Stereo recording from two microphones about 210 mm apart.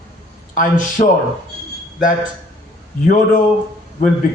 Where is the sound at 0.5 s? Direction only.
40° left (ahead or behind).